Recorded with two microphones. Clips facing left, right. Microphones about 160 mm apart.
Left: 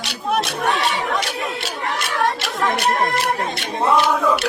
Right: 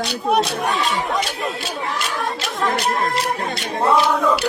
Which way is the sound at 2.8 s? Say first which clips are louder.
Left 1 dB; 75° left (ahead or behind).